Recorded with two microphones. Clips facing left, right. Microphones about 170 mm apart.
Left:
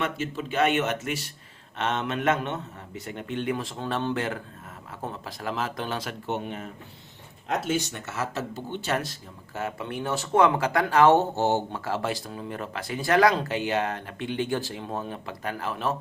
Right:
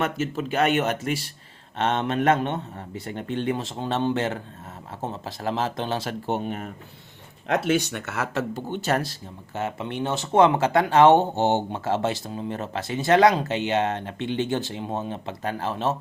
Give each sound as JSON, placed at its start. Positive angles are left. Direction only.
{"t": 0.0, "sound": "speech", "side_deg": -45}
{"t": 7.4, "sound": "speech", "side_deg": -70}
{"t": 9.6, "sound": "speech", "side_deg": -25}